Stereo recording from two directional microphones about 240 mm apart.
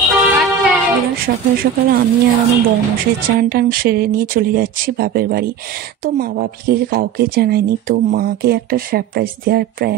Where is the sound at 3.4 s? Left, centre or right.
Right.